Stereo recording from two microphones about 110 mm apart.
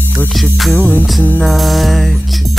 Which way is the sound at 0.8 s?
15° left (ahead or behind).